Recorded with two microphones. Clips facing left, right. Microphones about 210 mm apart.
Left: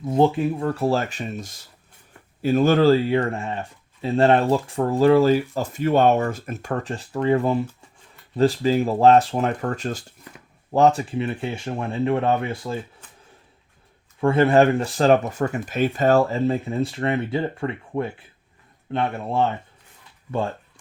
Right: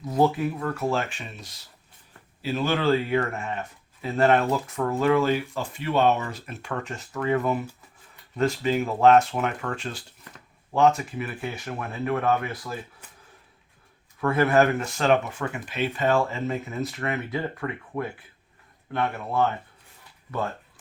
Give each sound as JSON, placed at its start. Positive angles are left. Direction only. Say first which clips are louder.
{"t": 0.0, "sound": "speech", "louder": "left 4 dB", "side_deg": 25}
{"t": 13.0, "sound": "a sound", "louder": "left 1 dB", "side_deg": -10}
{"t": 14.2, "sound": "speech", "louder": "left 4 dB", "side_deg": 25}